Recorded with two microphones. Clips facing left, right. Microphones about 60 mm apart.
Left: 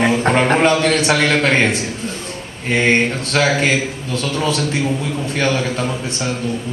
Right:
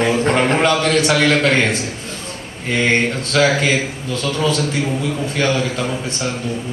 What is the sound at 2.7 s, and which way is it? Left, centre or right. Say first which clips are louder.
Mantra: left 1 dB; left.